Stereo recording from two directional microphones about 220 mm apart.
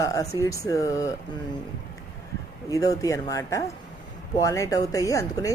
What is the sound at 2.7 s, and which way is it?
Speech, 15° left (ahead or behind).